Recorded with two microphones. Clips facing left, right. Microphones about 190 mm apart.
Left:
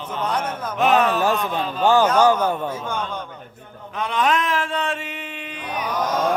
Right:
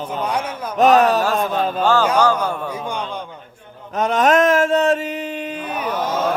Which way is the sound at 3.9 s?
45° right (ahead or behind).